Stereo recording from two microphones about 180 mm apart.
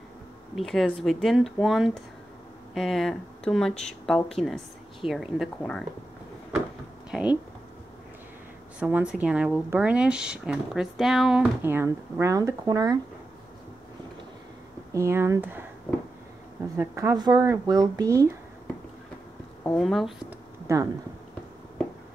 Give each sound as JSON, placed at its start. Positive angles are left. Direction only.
{"t": 0.6, "sound": "speech", "side_deg": 0}
{"t": 7.1, "sound": "a sound", "side_deg": -5}
{"t": 8.7, "sound": "speech", "side_deg": -5}
{"t": 14.9, "sound": "speech", "side_deg": -15}
{"t": 16.7, "sound": "speech", "side_deg": -15}
{"t": 19.6, "sound": "speech", "side_deg": 5}
{"t": 20.6, "sound": "speech", "side_deg": -20}